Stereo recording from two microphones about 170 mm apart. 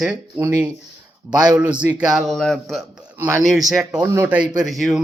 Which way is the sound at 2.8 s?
15° right (ahead or behind).